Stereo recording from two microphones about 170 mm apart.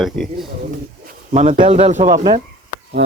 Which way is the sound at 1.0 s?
45° right (ahead or behind).